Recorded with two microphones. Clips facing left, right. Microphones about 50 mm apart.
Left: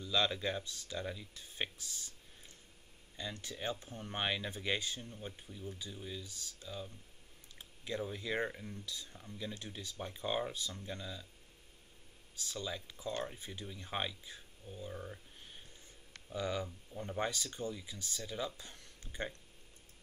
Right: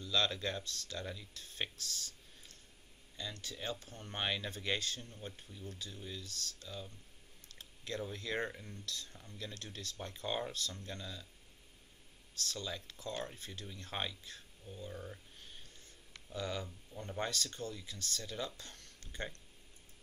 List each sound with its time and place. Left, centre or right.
0.0 s speech: centre
12.4 s speech: centre